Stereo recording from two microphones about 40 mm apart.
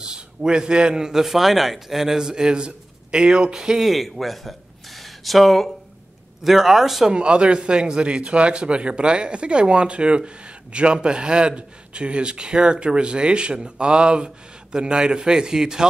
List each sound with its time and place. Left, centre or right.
0.0 s a man's voice: centre
1.2 s a man's voice: centre
3.8 s a man's voice: centre
7.1 s a man's voice: right